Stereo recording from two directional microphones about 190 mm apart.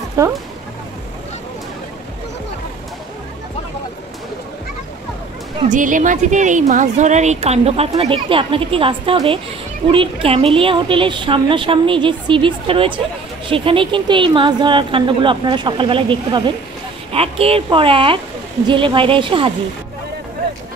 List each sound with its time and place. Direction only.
0.2 s speech: 15° right (ahead or behind)
5.7 s a woman's voice: 45° right (ahead or behind); by 19.5 s 25° right (ahead or behind)